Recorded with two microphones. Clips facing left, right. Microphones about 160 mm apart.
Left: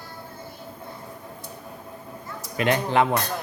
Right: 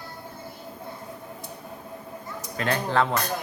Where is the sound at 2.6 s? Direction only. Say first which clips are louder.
Left 3 dB; 15° left (ahead or behind).